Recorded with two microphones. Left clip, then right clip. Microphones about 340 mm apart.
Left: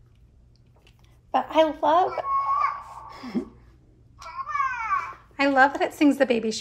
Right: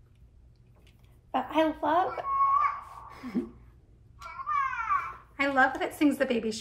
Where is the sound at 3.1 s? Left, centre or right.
Left.